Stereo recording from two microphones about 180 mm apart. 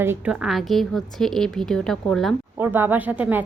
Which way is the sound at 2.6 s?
10° right (ahead or behind).